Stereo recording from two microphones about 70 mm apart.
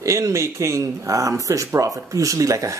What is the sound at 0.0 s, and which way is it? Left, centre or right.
Speech, right.